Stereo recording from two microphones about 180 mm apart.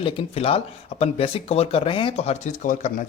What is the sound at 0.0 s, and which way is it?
Speech, 30° left (ahead or behind).